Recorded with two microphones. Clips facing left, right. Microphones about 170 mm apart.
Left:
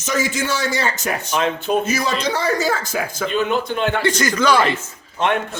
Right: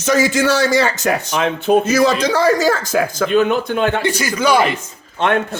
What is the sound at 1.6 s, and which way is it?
Speech, 75° right (ahead or behind).